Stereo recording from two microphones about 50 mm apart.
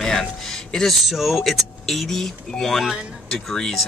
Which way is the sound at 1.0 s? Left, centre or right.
Centre.